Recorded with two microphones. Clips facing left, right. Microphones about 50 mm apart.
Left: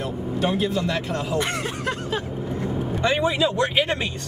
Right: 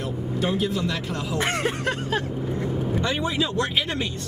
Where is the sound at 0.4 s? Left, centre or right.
Left.